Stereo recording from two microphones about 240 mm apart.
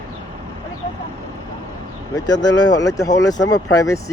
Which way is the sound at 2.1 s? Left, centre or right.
Centre.